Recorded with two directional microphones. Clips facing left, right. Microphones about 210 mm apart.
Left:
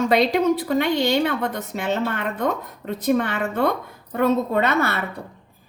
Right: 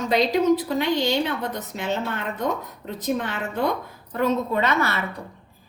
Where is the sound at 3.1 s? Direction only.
55° left (ahead or behind).